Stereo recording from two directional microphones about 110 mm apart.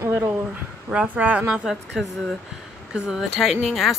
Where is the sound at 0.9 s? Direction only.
15° right (ahead or behind).